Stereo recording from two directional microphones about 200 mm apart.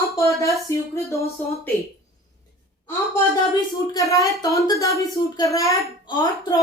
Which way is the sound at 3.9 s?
15° left (ahead or behind).